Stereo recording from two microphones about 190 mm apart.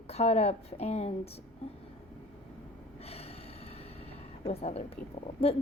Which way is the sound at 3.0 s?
30° left (ahead or behind).